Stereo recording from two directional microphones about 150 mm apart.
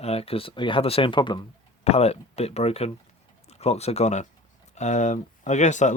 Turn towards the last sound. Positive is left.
turn(degrees=55)  # may be behind; listen again after turning